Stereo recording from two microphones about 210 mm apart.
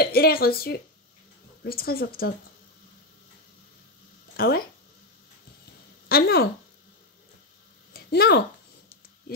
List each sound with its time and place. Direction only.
0.0 s speech: 45° left (ahead or behind)
4.4 s speech: 45° left (ahead or behind)
6.0 s speech: 45° left (ahead or behind)
7.9 s a sound: 50° left (ahead or behind)